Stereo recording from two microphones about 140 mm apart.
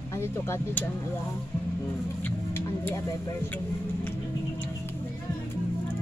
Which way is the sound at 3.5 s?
15° left (ahead or behind).